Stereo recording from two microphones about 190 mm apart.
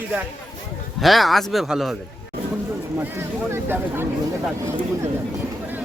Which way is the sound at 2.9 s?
10° right (ahead or behind).